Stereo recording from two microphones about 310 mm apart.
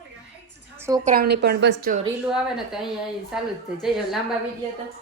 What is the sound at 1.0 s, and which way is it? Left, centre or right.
A woman's voice, right.